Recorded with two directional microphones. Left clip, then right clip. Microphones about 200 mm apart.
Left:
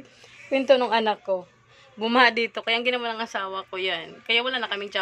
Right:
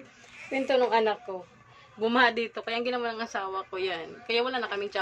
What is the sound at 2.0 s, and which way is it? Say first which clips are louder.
Speech: left 4 dB; 25° left (ahead or behind).